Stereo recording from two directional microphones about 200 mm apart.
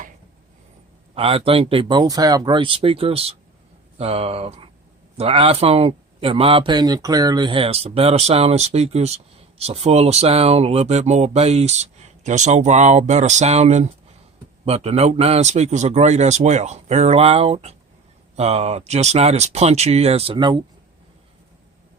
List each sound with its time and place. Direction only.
1.1 s speech: 30° right (ahead or behind)